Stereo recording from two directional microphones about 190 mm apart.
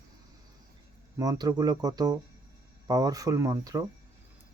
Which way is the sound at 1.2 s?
20° right (ahead or behind).